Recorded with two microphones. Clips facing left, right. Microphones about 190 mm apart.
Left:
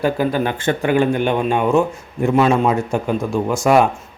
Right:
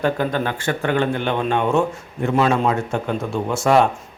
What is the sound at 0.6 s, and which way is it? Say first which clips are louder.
Speech: left 4 dB; 25° left (ahead or behind).